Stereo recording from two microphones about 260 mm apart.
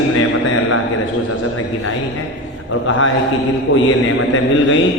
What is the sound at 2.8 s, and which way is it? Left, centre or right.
A man's voice, left.